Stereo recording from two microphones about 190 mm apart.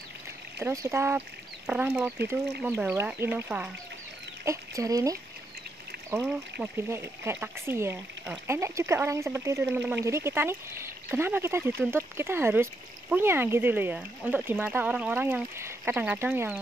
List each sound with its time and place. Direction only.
0.6 s speech: 15° right (ahead or behind)